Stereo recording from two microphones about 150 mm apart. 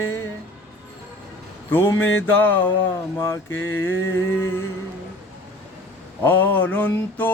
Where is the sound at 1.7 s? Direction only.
15° left (ahead or behind).